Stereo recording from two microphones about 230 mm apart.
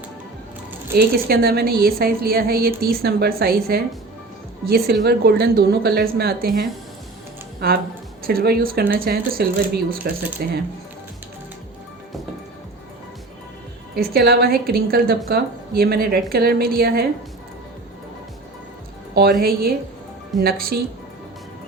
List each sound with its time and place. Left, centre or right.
0.9 s a woman's voice: right
13.9 s a woman's voice: right
19.4 s a woman's voice: right